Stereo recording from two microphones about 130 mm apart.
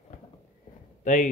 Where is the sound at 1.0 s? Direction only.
70° left (ahead or behind).